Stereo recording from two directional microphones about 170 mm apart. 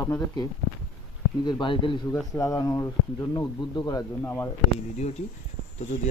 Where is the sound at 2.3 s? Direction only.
20° left (ahead or behind).